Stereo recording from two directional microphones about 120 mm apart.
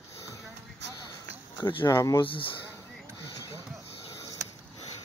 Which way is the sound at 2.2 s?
45° left (ahead or behind).